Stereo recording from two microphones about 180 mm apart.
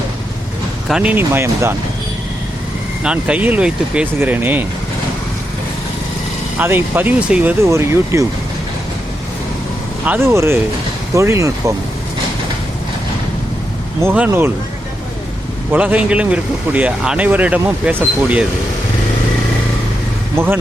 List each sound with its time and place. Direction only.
0.9 s speech: 5° right (ahead or behind)
3.0 s speech: 5° right (ahead or behind)
6.6 s speech: 10° right (ahead or behind)
10.1 s speech: 15° right (ahead or behind)
14.0 s speech: 10° right (ahead or behind)
15.7 s speech: 10° right (ahead or behind)
20.3 s speech: 10° right (ahead or behind)